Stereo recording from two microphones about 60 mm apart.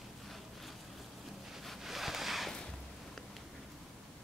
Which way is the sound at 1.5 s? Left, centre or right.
Centre.